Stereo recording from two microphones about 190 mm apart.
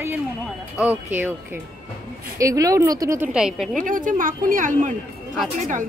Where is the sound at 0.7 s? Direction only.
10° right (ahead or behind).